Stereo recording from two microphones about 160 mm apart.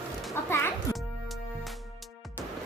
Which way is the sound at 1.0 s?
Centre (ahead or behind).